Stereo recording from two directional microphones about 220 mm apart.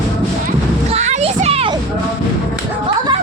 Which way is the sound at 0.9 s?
30° right (ahead or behind).